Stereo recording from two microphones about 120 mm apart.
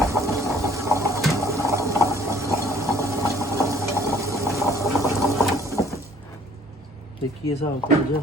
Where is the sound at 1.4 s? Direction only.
25° right (ahead or behind).